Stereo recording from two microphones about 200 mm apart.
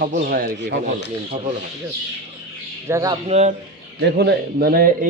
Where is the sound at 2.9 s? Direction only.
15° right (ahead or behind).